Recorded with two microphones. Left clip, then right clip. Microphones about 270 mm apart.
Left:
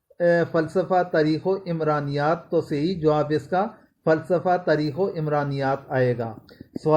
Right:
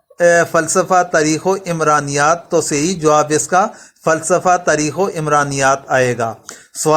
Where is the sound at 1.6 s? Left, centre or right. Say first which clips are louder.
Right 10 dB; centre.